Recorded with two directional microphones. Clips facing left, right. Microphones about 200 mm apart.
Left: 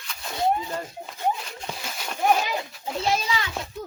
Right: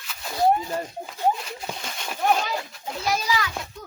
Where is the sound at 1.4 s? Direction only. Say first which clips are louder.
Right 2 dB; centre (ahead or behind).